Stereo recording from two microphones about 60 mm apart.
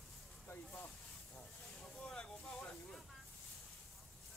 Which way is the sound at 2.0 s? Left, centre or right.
Centre.